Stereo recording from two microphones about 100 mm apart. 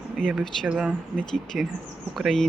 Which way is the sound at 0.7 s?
5° right (ahead or behind).